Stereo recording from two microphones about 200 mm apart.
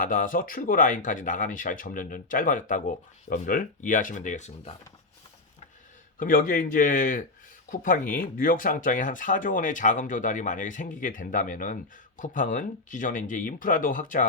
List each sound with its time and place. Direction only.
0.0 s speech: 40° left (ahead or behind)
6.1 s speech: 45° left (ahead or behind)